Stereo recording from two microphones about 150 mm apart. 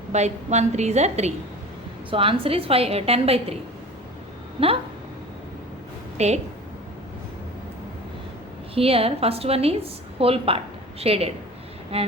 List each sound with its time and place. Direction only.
0.1 s a woman's voice: 50° right (ahead or behind)
2.0 s a woman's voice: 35° right (ahead or behind)
4.6 s a woman's voice: 40° right (ahead or behind)
6.1 s a woman's voice: 45° right (ahead or behind)
8.7 s a woman's voice: 40° right (ahead or behind)